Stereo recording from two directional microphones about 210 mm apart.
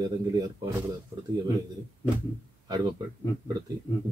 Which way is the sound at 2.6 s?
20° right (ahead or behind).